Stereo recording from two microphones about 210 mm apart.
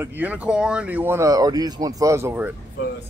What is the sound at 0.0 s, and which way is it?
Speech, 10° right (ahead or behind).